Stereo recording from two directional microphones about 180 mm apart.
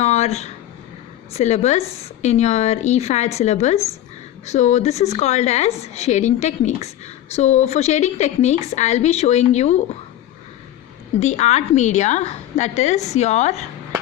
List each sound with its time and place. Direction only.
0.0 s a sound: 35° left (ahead or behind)
1.3 s a woman's voice: 40° left (ahead or behind)
11.2 s a woman's voice: 40° left (ahead or behind)